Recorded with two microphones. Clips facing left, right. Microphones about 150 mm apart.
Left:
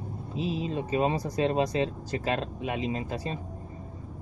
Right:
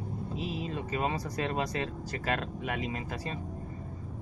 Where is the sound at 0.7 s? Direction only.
25° left (ahead or behind).